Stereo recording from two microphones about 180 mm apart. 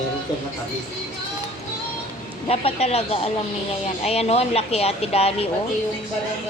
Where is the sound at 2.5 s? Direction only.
35° left (ahead or behind).